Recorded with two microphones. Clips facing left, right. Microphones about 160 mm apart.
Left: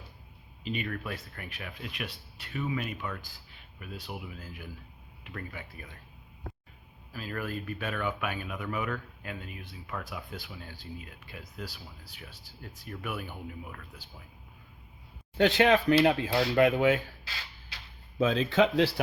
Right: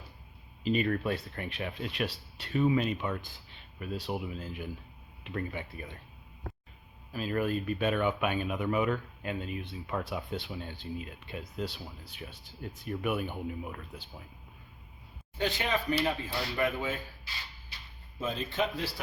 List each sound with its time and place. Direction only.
0.6 s speech: 35° right (ahead or behind)
7.1 s speech: 20° right (ahead or behind)
15.4 s a man's voice: 75° left (ahead or behind)